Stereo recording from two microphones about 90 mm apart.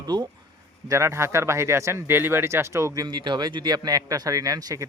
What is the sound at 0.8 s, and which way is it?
Speech, 35° right (ahead or behind).